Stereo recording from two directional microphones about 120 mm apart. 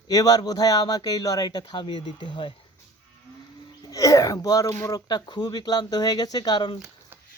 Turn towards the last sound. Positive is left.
turn(degrees=35)  # may be behind; listen again after turning